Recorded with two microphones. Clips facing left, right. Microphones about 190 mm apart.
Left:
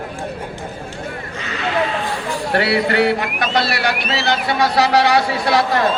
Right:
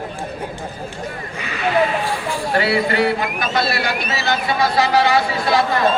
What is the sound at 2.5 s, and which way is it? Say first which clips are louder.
A man's voice: left 1 dB; 65° left (ahead or behind).